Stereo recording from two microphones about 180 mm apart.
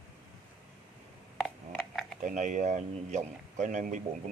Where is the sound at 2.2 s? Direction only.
45° right (ahead or behind).